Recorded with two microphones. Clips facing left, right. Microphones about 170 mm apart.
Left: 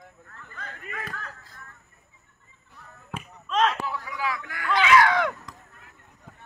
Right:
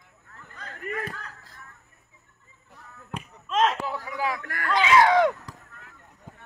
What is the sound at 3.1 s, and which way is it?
Basketball bounce, centre (ahead or behind).